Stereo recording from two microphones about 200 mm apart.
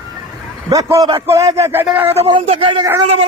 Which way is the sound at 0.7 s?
15° right (ahead or behind).